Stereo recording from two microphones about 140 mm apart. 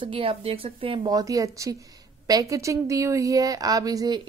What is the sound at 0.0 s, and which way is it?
A woman's voice, 40° right (ahead or behind).